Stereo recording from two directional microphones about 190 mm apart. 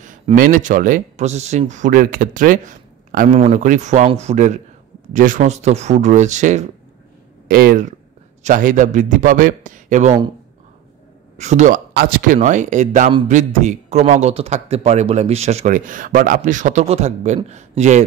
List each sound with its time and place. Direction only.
0.0 s a man's voice: 45° right (ahead or behind)
11.3 s speech: 40° right (ahead or behind)
11.9 s a man's voice: 55° right (ahead or behind); by 18.0 s 35° right (ahead or behind)